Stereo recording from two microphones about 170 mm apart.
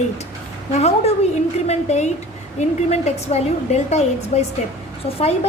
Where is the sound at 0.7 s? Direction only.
40° left (ahead or behind).